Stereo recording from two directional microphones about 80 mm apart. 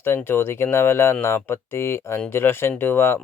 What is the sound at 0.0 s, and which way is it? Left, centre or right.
Speech, left.